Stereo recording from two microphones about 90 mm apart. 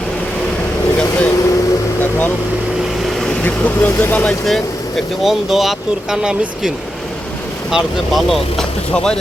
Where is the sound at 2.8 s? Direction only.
5° right (ahead or behind).